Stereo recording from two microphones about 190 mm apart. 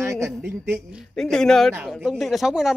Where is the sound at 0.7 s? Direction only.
5° left (ahead or behind).